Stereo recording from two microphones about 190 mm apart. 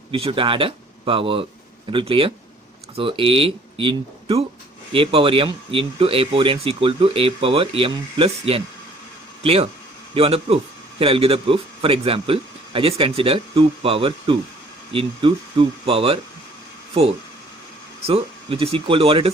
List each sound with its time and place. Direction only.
0.1 s speech: 25° right (ahead or behind)
18.0 s speech: 30° right (ahead or behind)